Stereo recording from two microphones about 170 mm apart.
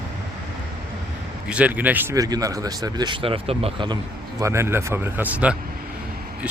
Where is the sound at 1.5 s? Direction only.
10° right (ahead or behind); by 3.9 s 30° right (ahead or behind).